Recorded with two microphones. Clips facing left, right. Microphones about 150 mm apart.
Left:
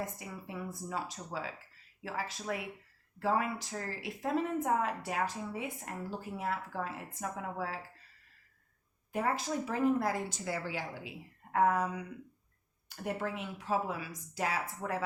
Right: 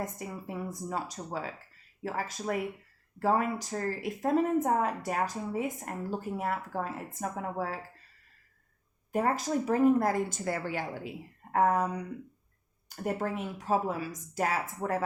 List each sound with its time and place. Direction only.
0.0 s a woman's voice: 45° right (ahead or behind)
9.1 s a woman's voice: 45° right (ahead or behind)
11.5 s a woman's voice: 40° right (ahead or behind)